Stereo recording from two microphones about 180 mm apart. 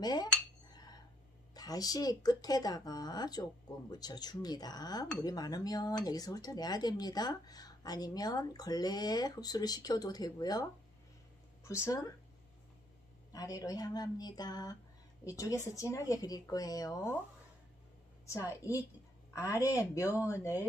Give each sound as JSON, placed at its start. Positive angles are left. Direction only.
{"t": 0.0, "sound": "speech", "side_deg": 20}
{"t": 1.5, "sound": "a woman's voice", "side_deg": 20}
{"t": 13.3, "sound": "a woman's voice", "side_deg": 20}
{"t": 18.2, "sound": "a woman's voice", "side_deg": 15}